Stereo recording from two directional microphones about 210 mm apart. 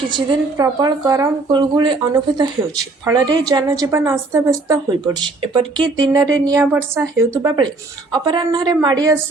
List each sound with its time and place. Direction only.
0.1 s a woman's voice: 20° right (ahead or behind)